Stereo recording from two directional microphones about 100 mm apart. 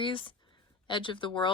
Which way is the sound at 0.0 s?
60° left (ahead or behind).